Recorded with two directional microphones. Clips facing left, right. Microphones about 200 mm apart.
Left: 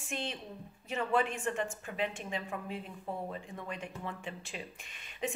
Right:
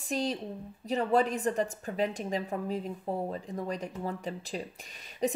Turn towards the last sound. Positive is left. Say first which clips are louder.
# right 7 dB
turn(degrees=-40)  # may be behind; listen again after turning